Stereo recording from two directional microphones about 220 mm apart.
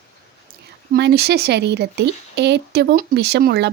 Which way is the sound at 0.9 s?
45° right (ahead or behind).